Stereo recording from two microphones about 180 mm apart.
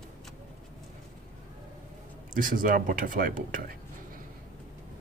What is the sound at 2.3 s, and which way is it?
Speech, 50° right (ahead or behind).